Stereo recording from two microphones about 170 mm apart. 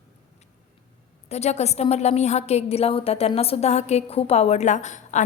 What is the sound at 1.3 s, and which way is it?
A woman's voice, 40° left (ahead or behind).